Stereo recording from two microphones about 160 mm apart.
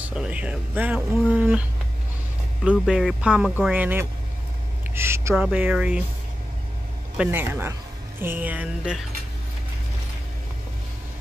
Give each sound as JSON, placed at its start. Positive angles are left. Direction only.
{"t": 0.0, "sound": "speech", "side_deg": -5}
{"t": 4.9, "sound": "a sound", "side_deg": -15}
{"t": 5.3, "sound": "speech", "side_deg": -5}
{"t": 7.2, "sound": "speech", "side_deg": -15}